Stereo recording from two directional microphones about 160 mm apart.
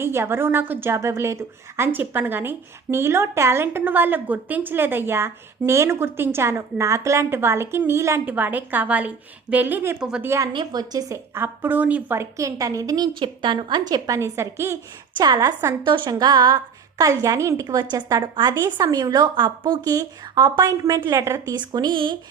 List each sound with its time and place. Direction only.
0.0 s a woman's voice: 15° right (ahead or behind)
10.2 s a woman's voice: 20° right (ahead or behind)
10.5 s a woman's voice: 30° right (ahead or behind)